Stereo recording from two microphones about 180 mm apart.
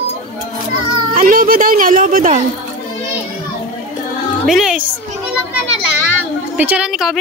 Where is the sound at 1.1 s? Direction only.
50° right (ahead or behind).